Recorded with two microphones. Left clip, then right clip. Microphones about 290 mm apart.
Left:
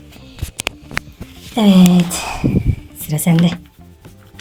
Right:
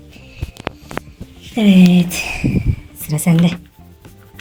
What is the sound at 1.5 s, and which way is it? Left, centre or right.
Speech, centre.